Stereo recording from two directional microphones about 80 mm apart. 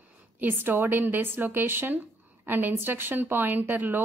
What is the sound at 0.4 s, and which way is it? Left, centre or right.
A woman's voice, right.